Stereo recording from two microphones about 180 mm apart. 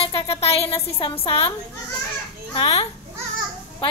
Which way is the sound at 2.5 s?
30° left (ahead or behind).